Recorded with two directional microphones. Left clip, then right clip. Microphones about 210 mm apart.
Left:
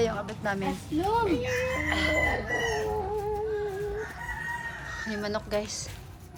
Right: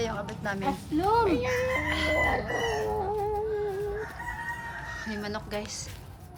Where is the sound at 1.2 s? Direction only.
30° right (ahead or behind).